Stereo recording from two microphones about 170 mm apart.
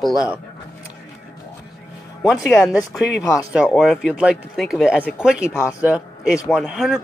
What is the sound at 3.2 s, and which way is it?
Speech, 20° left (ahead or behind).